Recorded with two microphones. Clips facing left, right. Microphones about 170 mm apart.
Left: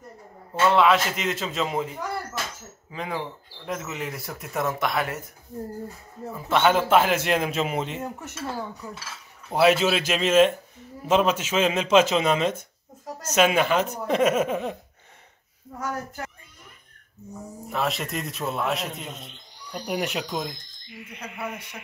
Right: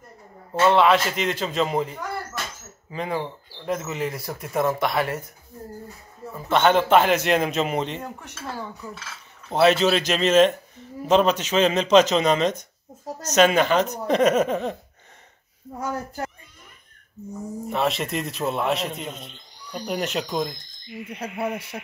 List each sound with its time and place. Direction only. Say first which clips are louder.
0.7 s speech: right 2 dB; centre (ahead or behind)
6.3 s speech: right 2 dB; 5° left (ahead or behind)
15.8 s speech: right 3 dB; 25° right (ahead or behind)
17.6 s speech: right 3 dB; centre (ahead or behind)
21.2 s hoot: right 6 dB; 30° right (ahead or behind)